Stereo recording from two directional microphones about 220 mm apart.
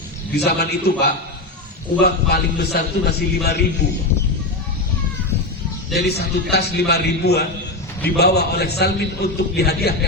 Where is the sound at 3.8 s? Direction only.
35° left (ahead or behind).